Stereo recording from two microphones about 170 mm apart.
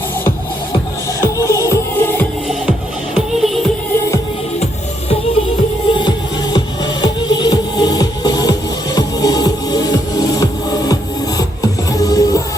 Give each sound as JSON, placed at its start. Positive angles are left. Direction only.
{"t": 1.2, "sound": "music", "side_deg": 20}
{"t": 3.2, "sound": "music", "side_deg": 0}
{"t": 6.0, "sound": "music", "side_deg": 25}